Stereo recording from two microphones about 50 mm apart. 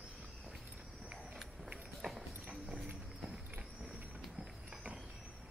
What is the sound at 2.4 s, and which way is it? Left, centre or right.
Clip-clop, right.